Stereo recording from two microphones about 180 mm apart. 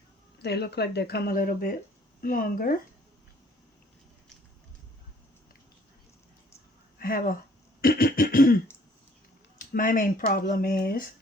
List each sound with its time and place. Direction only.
0.4 s speech: 65° left (ahead or behind)
7.0 s speech: 55° left (ahead or behind)
7.8 s cough: 55° left (ahead or behind)
9.6 s speech: 50° left (ahead or behind)